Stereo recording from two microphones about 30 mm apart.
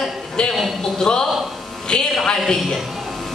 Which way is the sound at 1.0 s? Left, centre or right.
Left.